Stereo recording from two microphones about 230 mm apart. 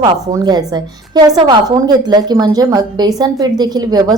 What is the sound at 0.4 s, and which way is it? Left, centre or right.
A woman's voice, centre.